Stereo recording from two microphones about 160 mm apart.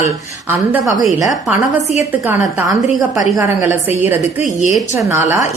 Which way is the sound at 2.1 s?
15° right (ahead or behind).